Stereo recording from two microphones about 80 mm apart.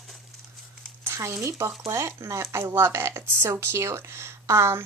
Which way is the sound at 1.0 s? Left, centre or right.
Right.